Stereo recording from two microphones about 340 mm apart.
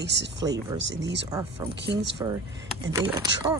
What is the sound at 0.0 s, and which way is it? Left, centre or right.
Speech, right.